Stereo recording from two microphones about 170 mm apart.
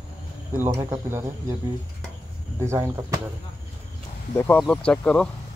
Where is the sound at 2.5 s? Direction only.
15° right (ahead or behind).